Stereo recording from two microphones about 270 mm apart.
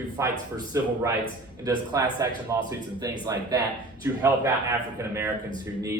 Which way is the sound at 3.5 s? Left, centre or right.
Centre.